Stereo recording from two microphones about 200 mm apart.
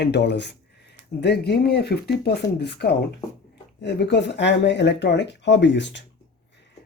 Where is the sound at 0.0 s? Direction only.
55° left (ahead or behind).